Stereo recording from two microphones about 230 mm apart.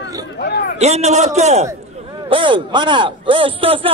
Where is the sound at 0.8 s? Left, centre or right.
Right.